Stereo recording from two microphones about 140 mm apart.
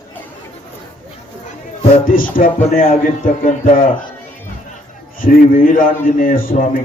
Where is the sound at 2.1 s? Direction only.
80° left.